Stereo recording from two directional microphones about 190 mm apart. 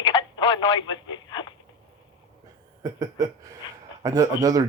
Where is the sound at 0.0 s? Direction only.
25° left (ahead or behind).